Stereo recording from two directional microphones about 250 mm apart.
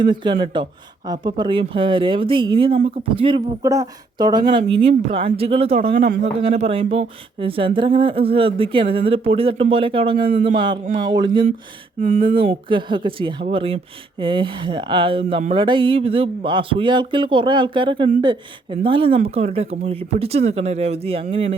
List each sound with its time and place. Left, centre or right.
0.0 s speech: centre
11.9 s speech: right